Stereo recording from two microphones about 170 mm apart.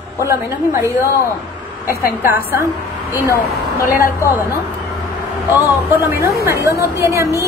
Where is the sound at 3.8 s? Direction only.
60° left (ahead or behind).